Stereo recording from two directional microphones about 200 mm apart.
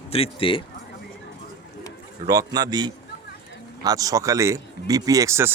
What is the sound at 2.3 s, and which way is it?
A man's voice, 20° right (ahead or behind).